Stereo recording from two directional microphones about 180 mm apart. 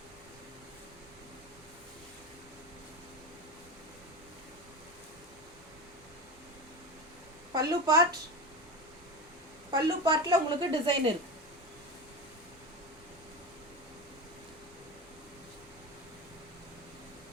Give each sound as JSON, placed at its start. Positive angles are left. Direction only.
{"t": 7.5, "sound": "speech", "side_deg": -20}
{"t": 9.7, "sound": "a woman's voice", "side_deg": -25}